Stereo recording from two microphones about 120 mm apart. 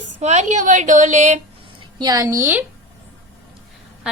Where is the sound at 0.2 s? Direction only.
70° right (ahead or behind).